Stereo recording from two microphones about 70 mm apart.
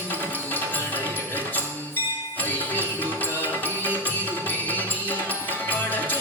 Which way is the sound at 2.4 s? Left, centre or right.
Left.